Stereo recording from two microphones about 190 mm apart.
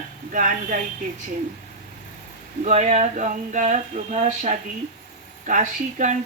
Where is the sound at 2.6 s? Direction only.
35° right (ahead or behind).